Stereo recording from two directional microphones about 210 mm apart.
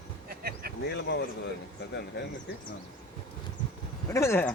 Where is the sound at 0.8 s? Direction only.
50° left (ahead or behind).